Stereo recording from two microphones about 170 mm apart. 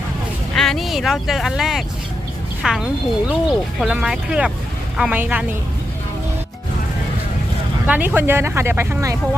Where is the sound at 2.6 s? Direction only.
Centre (ahead or behind).